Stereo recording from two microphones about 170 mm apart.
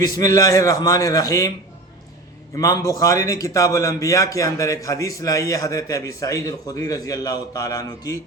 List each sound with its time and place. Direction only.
0.0 s a man's voice: 20° left (ahead or behind)
2.6 s a man's voice: 20° left (ahead or behind)